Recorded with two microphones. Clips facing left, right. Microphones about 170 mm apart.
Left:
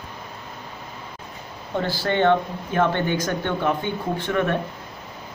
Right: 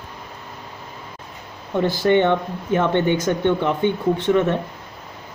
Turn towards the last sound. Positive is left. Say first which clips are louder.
# right 5 dB
turn(degrees=-20)  # may be behind; listen again after turning